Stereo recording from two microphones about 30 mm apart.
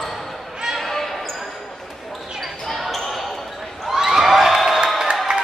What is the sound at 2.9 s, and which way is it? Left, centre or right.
Basketball bounce, centre.